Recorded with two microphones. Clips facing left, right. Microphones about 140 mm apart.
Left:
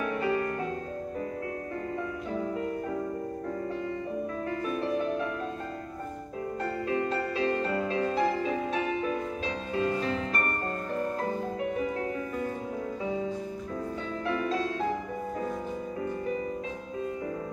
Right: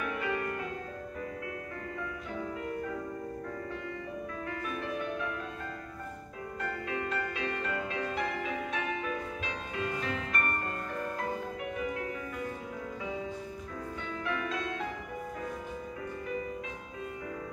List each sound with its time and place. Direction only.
0.0 s music: 35° left (ahead or behind)
4.6 s music: 30° left (ahead or behind)
6.6 s music: 35° left (ahead or behind)
11.6 s music: 35° left (ahead or behind)
14.2 s music: 35° left (ahead or behind)